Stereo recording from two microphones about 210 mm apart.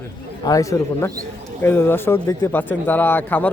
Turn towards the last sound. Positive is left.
turn(degrees=10)  # may be behind; listen again after turning